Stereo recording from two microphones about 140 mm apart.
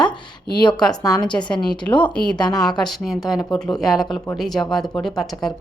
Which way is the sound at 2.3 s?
30° left (ahead or behind).